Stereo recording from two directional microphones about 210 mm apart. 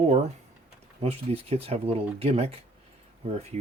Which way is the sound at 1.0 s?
30° right (ahead or behind).